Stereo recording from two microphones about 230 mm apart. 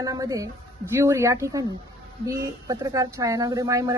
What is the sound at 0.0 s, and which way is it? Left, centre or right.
Speech, centre.